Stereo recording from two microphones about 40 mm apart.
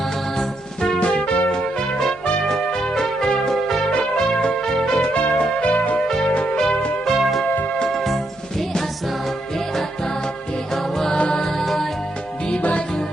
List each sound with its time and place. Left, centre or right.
0.3 s music: left
2.5 s music: centre
3.9 s music: centre
5.1 s music: left
6.1 s music: centre
7.1 s music: centre
10.9 s music: centre